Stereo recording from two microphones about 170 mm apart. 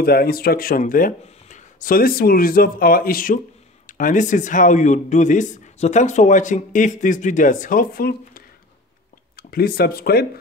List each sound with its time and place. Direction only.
0.0 s speech: 65° left (ahead or behind)